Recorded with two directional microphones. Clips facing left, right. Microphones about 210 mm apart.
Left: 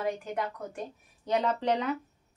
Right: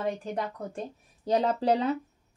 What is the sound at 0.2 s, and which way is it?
A woman's voice, 30° right (ahead or behind).